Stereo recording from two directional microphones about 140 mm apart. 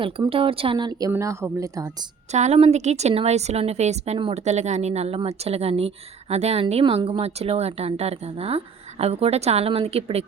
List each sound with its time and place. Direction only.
0.0 s speech: 40° right (ahead or behind); by 2.0 s 25° right (ahead or behind)
2.3 s speech: 50° right (ahead or behind)